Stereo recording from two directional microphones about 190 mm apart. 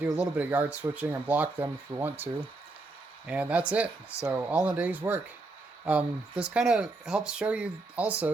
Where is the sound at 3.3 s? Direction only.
5° right (ahead or behind).